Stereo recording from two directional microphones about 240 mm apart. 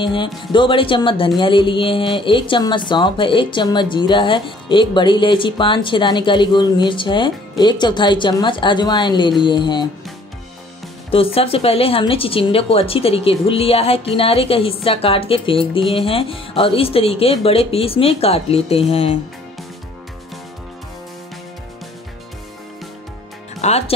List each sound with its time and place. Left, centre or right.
0.0 s speech: centre
11.1 s speech: left
23.6 s speech: left